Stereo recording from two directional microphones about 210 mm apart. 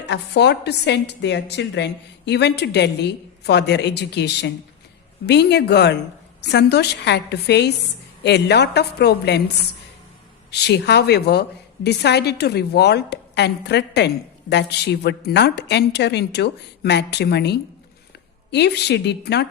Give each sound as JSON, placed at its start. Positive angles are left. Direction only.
{"t": 0.1, "sound": "a woman's voice", "side_deg": 55}
{"t": 10.5, "sound": "a woman's voice", "side_deg": 55}